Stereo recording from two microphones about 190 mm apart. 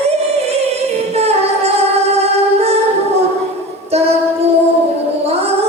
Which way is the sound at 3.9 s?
35° right (ahead or behind).